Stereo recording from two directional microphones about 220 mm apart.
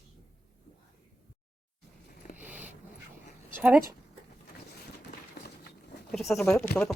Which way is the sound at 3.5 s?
10° right (ahead or behind).